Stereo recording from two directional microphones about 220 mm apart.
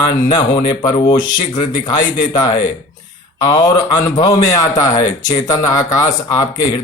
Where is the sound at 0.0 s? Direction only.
20° left (ahead or behind).